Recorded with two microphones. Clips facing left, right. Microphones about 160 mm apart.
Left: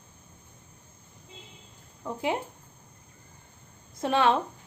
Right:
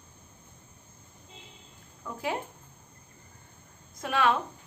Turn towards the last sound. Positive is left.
turn(degrees=30)  # may be behind; listen again after turning